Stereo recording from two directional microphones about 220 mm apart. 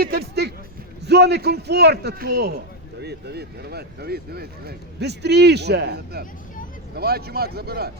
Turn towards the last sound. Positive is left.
turn(degrees=-45)  # may be behind; listen again after turning